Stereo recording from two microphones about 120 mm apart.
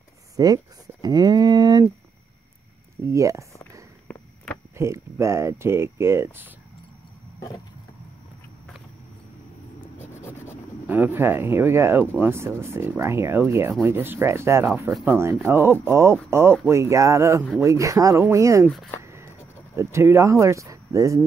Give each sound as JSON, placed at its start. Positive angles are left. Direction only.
{"t": 0.4, "sound": "a sound", "side_deg": -30}
{"t": 3.0, "sound": "speech", "side_deg": -25}
{"t": 4.7, "sound": "speech", "side_deg": -25}
{"t": 9.9, "sound": "vehicle", "side_deg": 15}
{"t": 10.9, "sound": "speech", "side_deg": -15}
{"t": 19.0, "sound": "a sound", "side_deg": -25}